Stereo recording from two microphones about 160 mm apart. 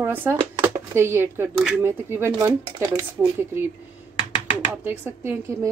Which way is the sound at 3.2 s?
15° right (ahead or behind).